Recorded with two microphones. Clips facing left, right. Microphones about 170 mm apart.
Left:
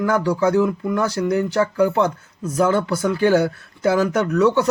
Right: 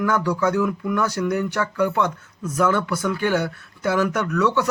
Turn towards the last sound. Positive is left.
turn(degrees=30)  # may be behind; listen again after turning